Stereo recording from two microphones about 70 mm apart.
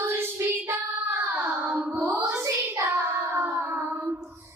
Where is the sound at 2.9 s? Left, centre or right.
Right.